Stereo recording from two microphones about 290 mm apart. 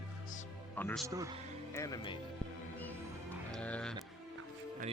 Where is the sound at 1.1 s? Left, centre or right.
Centre.